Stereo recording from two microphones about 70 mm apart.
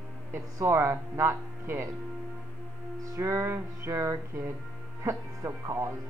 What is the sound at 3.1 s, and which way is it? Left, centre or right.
Speech, right.